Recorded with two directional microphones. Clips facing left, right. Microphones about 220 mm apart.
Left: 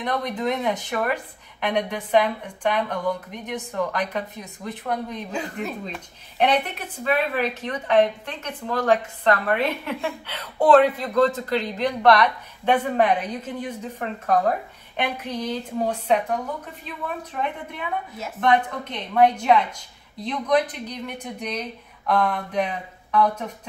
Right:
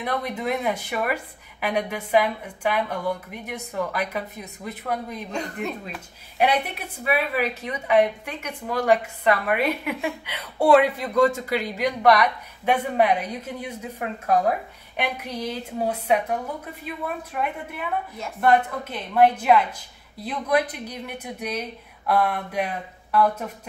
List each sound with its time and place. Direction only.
0.0 s speech: 10° right (ahead or behind)